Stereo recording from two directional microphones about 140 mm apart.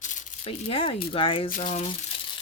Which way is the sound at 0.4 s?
40° left (ahead or behind).